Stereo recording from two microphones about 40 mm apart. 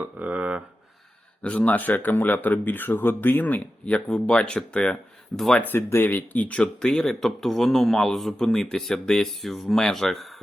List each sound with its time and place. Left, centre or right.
0.2 s a sound: right
1.4 s speech: left
2.0 s speech: left
3.4 s speech: left
4.1 s speech: left
5.6 s speech: left
6.3 s speech: left
6.7 s speech: centre
9.2 s speech: centre